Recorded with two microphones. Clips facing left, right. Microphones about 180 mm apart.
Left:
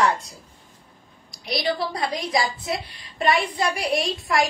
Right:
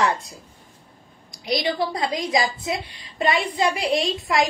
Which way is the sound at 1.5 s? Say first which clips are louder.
Right 2 dB; 20° right (ahead or behind).